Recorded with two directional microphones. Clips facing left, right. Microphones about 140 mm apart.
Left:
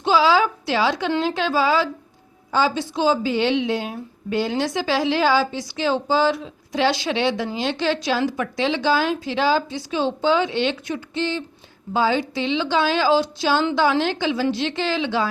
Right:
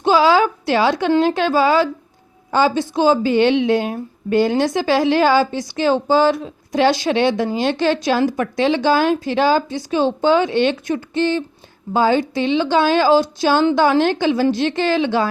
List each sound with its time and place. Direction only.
0.0 s a woman's voice: 50° right (ahead or behind)